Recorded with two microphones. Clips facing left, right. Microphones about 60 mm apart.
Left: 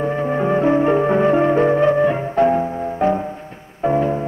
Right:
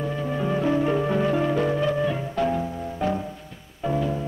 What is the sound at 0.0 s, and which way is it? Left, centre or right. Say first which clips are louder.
Music: left 8 dB; left.